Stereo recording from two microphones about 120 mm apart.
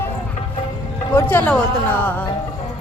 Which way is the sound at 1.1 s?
15° left (ahead or behind).